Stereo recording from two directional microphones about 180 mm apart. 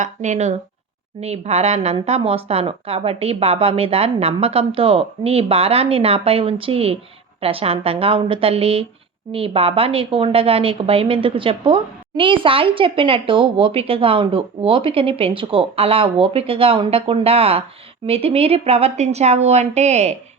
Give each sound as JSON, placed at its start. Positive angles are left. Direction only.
{"t": 0.0, "sound": "a woman's voice", "side_deg": -40}